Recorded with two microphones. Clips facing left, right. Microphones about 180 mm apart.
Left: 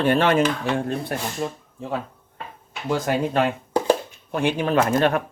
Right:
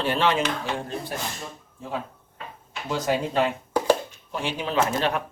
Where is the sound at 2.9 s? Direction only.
55° left (ahead or behind).